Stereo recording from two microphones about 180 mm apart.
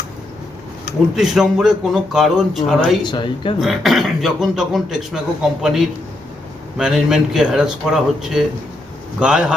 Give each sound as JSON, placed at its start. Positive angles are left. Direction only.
{"t": 1.1, "sound": "a man's voice", "side_deg": 0}
{"t": 3.0, "sound": "speech", "side_deg": 25}
{"t": 3.6, "sound": "a man's voice", "side_deg": 0}